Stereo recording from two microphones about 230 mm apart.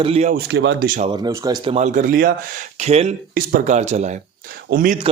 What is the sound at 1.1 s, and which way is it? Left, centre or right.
A man's voice, centre.